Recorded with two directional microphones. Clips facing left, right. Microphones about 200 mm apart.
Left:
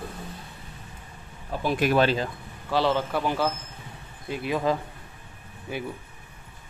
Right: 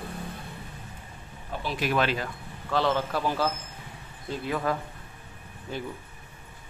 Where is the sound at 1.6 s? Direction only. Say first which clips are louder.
Left 6 dB; 50° left (ahead or behind).